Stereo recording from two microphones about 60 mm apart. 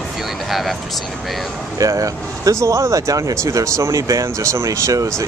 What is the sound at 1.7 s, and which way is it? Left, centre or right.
Speech, right.